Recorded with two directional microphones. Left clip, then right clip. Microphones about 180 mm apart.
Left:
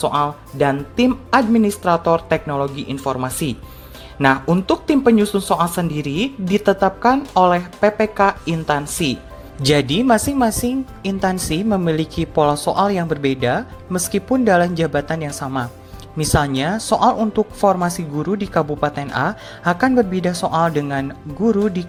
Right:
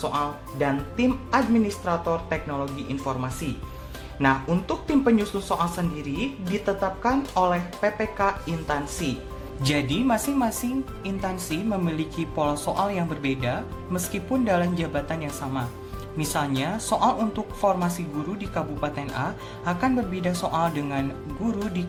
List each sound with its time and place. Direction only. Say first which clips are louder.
0.0 s a woman's voice: left 8 dB; 45° left (ahead or behind)